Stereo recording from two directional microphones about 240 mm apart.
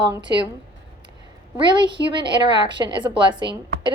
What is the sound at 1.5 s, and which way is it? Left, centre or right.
A woman's voice, centre.